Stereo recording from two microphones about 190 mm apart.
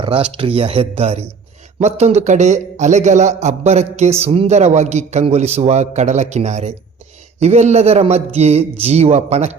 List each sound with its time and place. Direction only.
0.3 s a man's voice: 30° right (ahead or behind)